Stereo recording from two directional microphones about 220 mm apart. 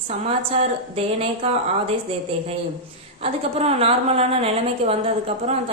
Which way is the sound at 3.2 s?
25° right (ahead or behind).